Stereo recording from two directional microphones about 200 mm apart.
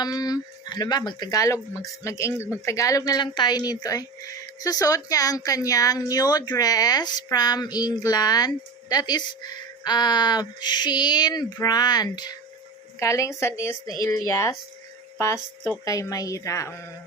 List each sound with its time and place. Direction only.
0.0 s a woman's voice: 20° left (ahead or behind)
15.8 s a woman's voice: 15° left (ahead or behind)